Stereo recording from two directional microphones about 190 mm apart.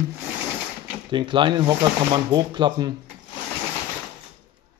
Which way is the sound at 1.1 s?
25° right (ahead or behind).